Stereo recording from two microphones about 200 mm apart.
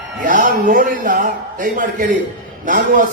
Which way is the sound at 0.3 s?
40° right (ahead or behind).